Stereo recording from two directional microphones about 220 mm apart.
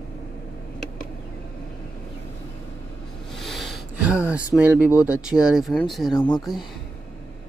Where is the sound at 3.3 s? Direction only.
Centre (ahead or behind).